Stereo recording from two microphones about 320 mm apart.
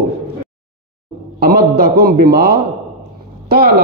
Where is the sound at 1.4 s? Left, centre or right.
Right.